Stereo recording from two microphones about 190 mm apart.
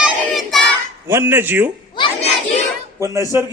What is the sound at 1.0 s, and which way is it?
Speech, 10° right (ahead or behind).